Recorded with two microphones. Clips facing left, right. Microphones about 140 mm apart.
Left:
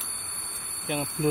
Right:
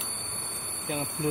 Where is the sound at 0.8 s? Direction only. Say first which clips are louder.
Left 3 dB; 15° left (ahead or behind).